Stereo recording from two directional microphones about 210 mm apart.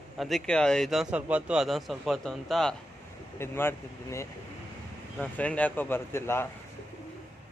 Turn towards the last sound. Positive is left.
turn(degrees=10)  # may be behind; listen again after turning